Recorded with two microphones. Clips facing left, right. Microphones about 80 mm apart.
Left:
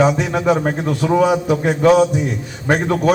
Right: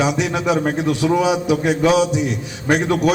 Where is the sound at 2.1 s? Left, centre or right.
Right.